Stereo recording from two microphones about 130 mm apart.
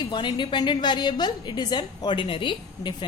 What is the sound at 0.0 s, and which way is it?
A woman's voice, 35° left (ahead or behind).